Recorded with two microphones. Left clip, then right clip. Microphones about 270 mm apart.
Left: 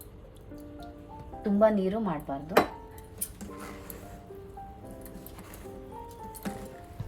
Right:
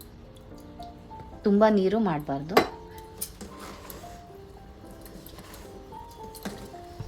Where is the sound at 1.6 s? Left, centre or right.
Right.